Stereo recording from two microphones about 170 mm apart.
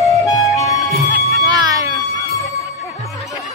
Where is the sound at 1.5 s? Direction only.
20° right (ahead or behind).